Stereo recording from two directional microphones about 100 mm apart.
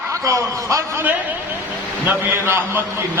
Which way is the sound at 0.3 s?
30° right (ahead or behind).